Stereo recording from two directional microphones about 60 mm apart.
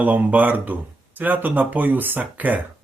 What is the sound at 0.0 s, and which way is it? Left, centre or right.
Speech, right.